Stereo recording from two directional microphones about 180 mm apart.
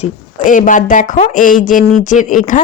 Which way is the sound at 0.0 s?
45° left (ahead or behind).